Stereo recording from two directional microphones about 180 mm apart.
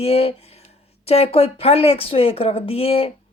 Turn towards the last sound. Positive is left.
turn(degrees=30)  # may be behind; listen again after turning